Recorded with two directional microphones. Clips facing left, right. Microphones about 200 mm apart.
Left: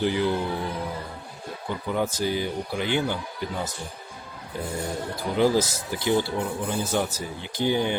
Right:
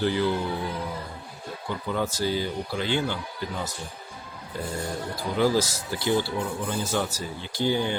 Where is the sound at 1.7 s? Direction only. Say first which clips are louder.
Left 2 dB; 15° left (ahead or behind).